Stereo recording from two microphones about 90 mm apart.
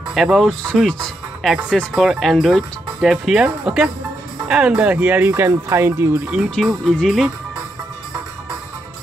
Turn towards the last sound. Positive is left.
turn(degrees=5)  # may be behind; listen again after turning